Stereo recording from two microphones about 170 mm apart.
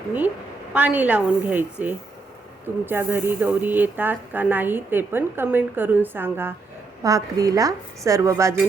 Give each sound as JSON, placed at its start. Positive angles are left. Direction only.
{"t": 0.7, "sound": "speech", "side_deg": -10}